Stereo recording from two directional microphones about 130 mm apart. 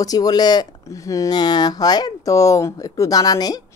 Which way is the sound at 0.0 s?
30° left (ahead or behind).